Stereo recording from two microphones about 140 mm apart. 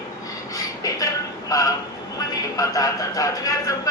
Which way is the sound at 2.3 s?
25° left (ahead or behind).